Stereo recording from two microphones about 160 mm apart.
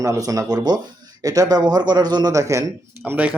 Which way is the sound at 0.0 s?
20° right (ahead or behind).